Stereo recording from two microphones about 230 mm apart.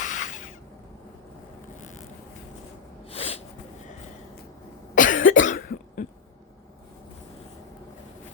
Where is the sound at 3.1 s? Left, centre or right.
Left.